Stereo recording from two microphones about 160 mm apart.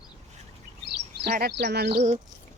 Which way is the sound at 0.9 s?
80° right.